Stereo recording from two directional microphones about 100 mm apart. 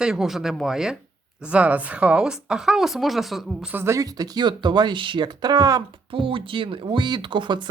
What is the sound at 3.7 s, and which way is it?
Speech, 25° right (ahead or behind).